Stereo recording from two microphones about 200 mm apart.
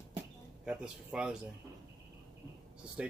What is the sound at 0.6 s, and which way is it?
Speech, 5° right (ahead or behind).